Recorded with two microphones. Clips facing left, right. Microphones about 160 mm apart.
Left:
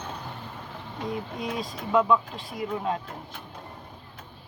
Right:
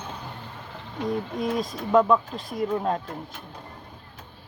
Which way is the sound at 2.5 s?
45° right (ahead or behind).